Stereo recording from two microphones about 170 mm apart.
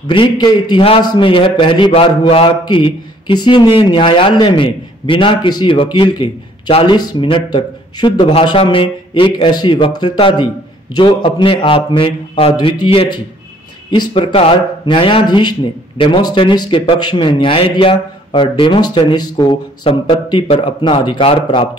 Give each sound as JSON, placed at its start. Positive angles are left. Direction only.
{"t": 0.1, "sound": "a man's voice", "side_deg": 30}